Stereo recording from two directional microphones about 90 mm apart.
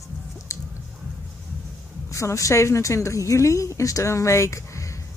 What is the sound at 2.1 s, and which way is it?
A woman's voice, 35° left (ahead or behind).